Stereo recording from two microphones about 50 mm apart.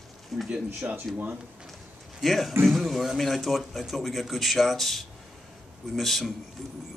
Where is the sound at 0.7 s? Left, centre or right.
Right.